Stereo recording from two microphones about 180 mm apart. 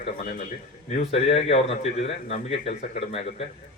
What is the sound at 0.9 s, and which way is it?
A man's voice, 35° left (ahead or behind).